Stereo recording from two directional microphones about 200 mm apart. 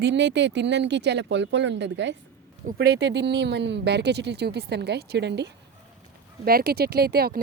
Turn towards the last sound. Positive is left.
turn(degrees=-50)  # may be behind; listen again after turning